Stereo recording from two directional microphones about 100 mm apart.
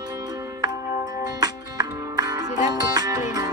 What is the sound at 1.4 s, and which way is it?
Music, 40° right (ahead or behind).